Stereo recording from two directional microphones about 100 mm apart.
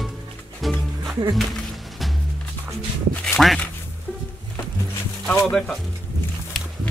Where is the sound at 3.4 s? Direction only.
5° left (ahead or behind).